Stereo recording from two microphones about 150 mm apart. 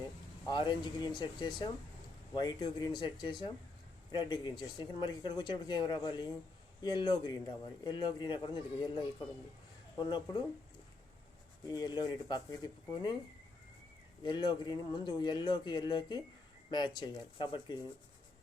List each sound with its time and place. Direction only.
0.4 s speech: 30° left (ahead or behind)
10.0 s speech: 30° left (ahead or behind)
11.6 s speech: 25° left (ahead or behind)
14.3 s speech: 30° left (ahead or behind)